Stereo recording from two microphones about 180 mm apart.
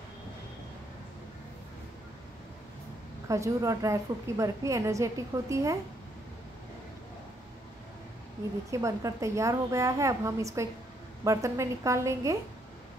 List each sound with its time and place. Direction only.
3.3 s a woman's voice: 15° right (ahead or behind)
8.6 s a woman's voice: 15° right (ahead or behind)